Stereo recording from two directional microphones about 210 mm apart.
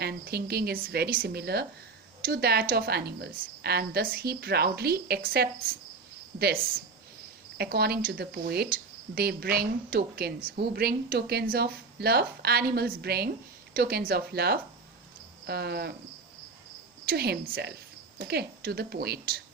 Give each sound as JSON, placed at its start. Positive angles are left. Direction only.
{"t": 0.0, "sound": "speech", "side_deg": -50}
{"t": 17.1, "sound": "speech", "side_deg": -45}